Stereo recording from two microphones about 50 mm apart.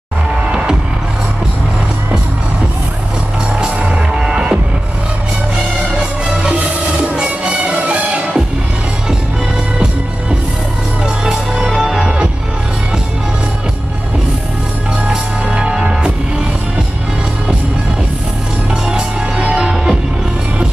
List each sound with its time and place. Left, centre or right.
3.8 s music: centre
7.2 s music: right
11.2 s music: centre
15.0 s music: centre
19.3 s music: right